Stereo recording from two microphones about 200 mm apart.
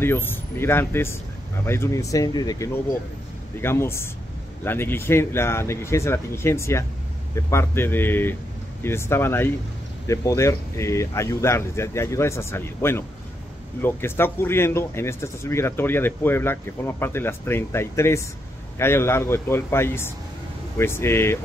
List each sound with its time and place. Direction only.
0.0 s speech: 10° left (ahead or behind)